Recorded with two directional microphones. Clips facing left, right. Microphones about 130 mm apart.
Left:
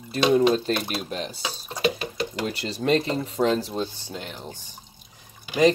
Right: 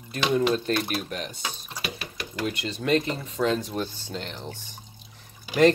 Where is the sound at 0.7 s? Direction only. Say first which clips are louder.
Even; 25° left (ahead or behind).